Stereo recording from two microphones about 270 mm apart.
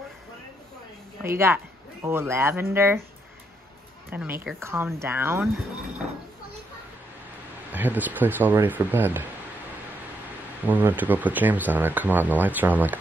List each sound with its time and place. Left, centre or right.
1.2 s speech: centre
4.1 s speech: centre
7.7 s speech: centre
10.7 s speech: centre